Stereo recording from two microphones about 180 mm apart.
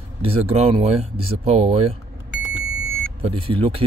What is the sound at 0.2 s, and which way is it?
Speech, 35° right (ahead or behind).